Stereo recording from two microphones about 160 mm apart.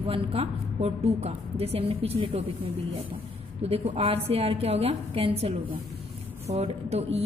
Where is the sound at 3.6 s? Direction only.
45° right (ahead or behind).